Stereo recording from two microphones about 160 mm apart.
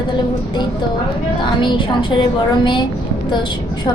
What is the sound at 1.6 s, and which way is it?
A woman's voice, 30° left (ahead or behind).